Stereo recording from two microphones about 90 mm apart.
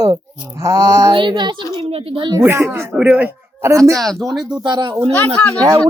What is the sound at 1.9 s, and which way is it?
Speech, 90° right.